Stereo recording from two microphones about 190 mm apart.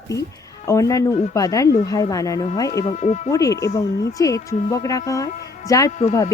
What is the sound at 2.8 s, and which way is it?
Speech, 40° left (ahead or behind).